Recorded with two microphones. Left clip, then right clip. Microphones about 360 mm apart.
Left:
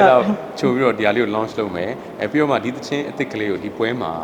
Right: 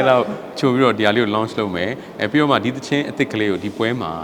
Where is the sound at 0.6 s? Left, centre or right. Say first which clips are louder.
Right 2 dB; right.